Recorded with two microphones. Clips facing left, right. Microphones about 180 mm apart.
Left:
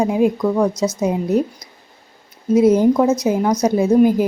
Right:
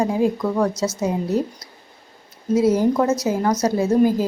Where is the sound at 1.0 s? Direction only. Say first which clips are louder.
Left 4 dB; 20° left (ahead or behind).